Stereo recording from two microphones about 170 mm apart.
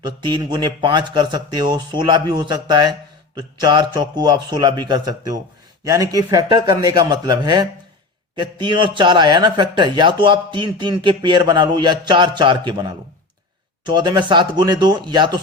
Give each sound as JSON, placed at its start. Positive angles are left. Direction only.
{"t": 0.0, "sound": "a man's voice", "side_deg": -25}